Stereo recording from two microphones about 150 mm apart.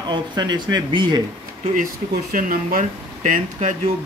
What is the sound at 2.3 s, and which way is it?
Speech, 65° right (ahead or behind).